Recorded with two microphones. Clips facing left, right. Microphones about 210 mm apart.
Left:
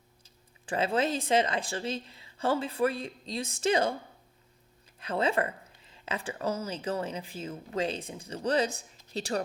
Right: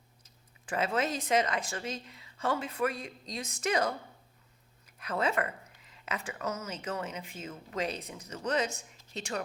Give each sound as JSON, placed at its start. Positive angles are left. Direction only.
{"t": 0.2, "sound": "a woman's voice", "side_deg": 30}